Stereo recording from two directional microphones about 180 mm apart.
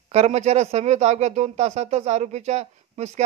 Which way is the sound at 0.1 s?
35° right (ahead or behind).